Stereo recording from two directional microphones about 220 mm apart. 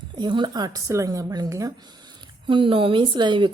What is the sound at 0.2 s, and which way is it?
A woman's voice, 20° right (ahead or behind).